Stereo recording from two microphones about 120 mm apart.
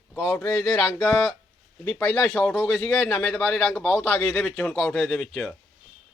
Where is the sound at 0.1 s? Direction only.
10° left (ahead or behind).